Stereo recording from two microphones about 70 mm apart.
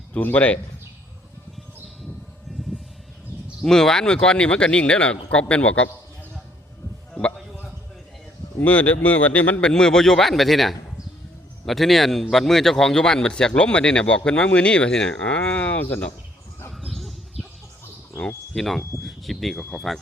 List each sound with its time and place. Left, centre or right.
0.1 s speech: left
3.6 s speech: centre
8.6 s speech: left
9.6 s a man's voice: centre
16.7 s bird: centre
18.5 s a man's voice: centre